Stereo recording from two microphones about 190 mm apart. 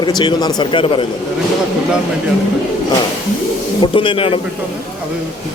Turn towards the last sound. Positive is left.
turn(degrees=30)  # may be behind; listen again after turning